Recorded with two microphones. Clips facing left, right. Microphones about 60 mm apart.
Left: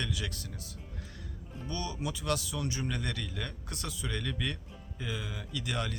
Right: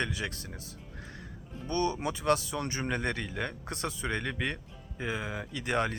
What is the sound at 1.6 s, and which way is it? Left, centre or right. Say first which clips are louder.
Speech: right 7 dB; right.